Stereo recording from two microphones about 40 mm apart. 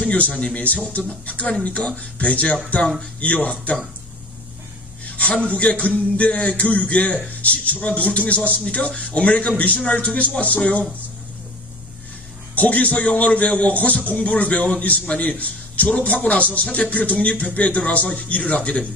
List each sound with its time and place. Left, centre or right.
0.1 s a man's voice: left
5.0 s a sound: left
5.5 s a man's voice: left
9.5 s a man's voice: left
9.7 s a man's voice: left
12.5 s a man's voice: left
15.9 s a man's voice: left